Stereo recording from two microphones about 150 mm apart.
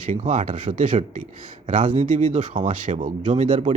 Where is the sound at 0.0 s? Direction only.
60° right (ahead or behind).